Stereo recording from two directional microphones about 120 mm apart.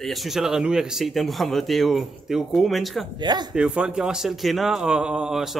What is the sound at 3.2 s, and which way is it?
Speech, 35° right (ahead or behind).